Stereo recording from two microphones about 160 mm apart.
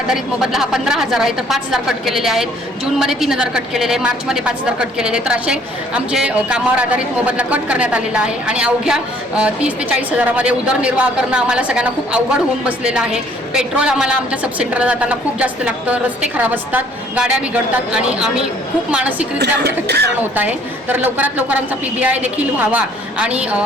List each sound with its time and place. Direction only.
0.1 s a woman's voice: 5° right (ahead or behind)
19.4 s speech: 90° right
20.3 s a woman's voice: 10° right (ahead or behind)